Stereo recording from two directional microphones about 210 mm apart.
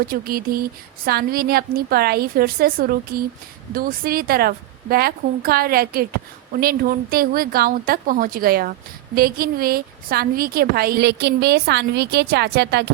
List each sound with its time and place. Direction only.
0.1 s a woman's voice: 45° right (ahead or behind)